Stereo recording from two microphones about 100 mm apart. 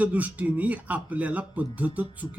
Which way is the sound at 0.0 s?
15° right (ahead or behind).